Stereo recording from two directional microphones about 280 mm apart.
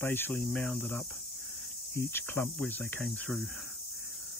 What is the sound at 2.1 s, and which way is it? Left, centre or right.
Speech, centre.